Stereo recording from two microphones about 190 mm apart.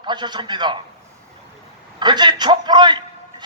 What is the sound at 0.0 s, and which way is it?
Speech, 25° right (ahead or behind).